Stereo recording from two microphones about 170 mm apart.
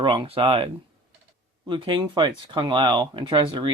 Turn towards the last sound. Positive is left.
turn(degrees=-25)  # may be behind; listen again after turning